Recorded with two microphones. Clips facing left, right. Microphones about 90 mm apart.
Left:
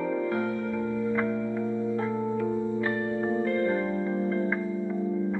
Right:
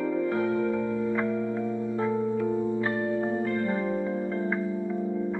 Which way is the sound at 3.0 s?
20° right (ahead or behind).